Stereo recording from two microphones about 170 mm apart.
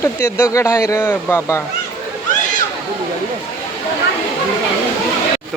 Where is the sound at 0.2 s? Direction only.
15° left (ahead or behind).